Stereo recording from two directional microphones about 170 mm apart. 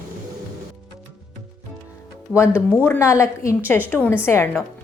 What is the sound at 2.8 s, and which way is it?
A woman's voice, 15° left (ahead or behind).